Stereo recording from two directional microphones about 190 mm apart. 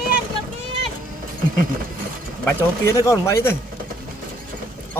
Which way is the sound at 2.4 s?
15° left (ahead or behind).